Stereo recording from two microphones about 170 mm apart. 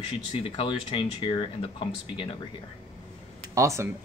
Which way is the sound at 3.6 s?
15° right (ahead or behind).